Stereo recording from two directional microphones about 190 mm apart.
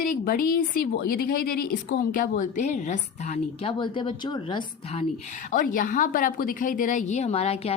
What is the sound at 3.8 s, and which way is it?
A woman's voice, 25° left (ahead or behind).